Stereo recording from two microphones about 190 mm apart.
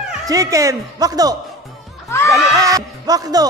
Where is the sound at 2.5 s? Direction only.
20° right (ahead or behind).